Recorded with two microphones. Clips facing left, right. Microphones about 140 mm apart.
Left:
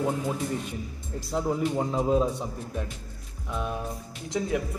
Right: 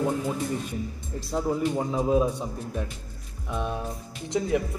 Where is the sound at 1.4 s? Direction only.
Centre (ahead or behind).